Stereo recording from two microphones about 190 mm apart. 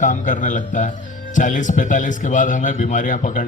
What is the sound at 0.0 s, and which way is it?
A man's voice, 40° left (ahead or behind).